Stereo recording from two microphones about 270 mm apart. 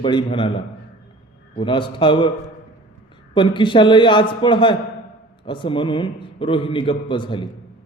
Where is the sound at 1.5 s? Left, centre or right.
Centre.